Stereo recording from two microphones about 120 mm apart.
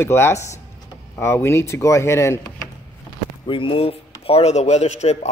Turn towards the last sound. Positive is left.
turn(degrees=65)  # may be behind; listen again after turning